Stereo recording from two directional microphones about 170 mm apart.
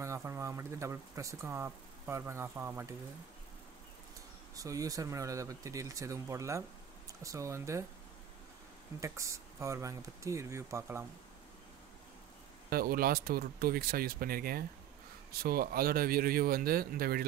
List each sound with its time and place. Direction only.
0.0 s speech: 15° right (ahead or behind)
4.6 s speech: 20° right (ahead or behind)
9.0 s speech: 15° right (ahead or behind)
12.6 s speech: 60° right (ahead or behind)